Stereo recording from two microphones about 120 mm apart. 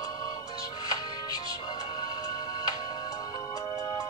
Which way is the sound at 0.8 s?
35° left (ahead or behind).